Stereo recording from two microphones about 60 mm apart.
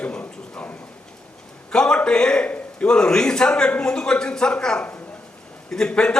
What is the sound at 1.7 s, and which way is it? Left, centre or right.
A man's voice, centre.